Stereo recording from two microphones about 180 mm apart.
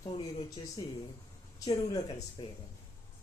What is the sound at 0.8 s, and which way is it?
Speech, 20° left (ahead or behind).